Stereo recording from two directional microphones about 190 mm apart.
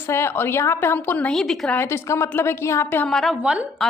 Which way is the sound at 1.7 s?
15° left (ahead or behind).